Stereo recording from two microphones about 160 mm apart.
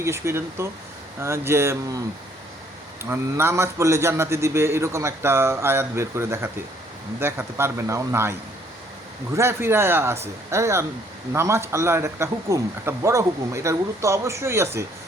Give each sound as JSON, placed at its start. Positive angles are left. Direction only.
{"t": 0.0, "sound": "a man's voice", "side_deg": -15}
{"t": 3.0, "sound": "a man's voice", "side_deg": -15}